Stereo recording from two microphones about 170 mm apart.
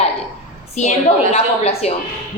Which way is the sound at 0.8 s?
45° left (ahead or behind).